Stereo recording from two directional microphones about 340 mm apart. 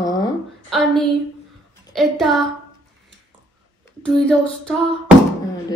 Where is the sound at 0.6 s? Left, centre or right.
Centre.